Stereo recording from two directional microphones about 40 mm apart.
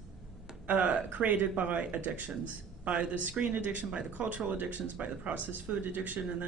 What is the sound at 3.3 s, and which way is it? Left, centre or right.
Speech, right.